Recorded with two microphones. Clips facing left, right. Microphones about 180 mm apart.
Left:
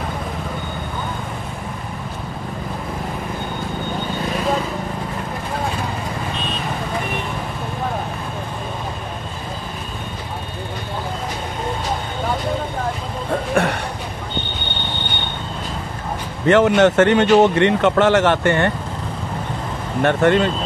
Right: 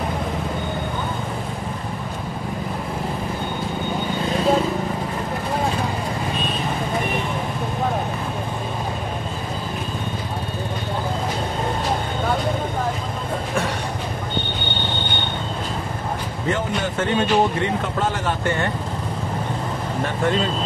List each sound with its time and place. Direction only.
13.6 s a sound: 60° left (ahead or behind)
16.4 s speech: 75° left (ahead or behind)
20.0 s speech: 70° left (ahead or behind)